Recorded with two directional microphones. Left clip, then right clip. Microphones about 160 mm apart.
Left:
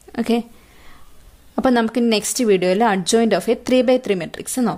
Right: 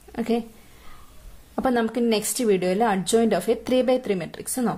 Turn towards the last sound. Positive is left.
turn(degrees=20)  # may be behind; listen again after turning